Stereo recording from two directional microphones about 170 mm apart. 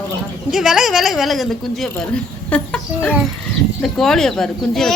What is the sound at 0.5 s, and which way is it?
A child's voice, 5° right (ahead or behind).